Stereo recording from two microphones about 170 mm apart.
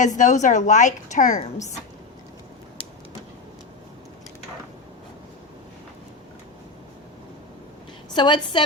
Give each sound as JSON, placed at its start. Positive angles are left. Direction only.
{"t": 0.0, "sound": "a woman's voice", "side_deg": 45}
{"t": 8.1, "sound": "a woman's voice", "side_deg": 25}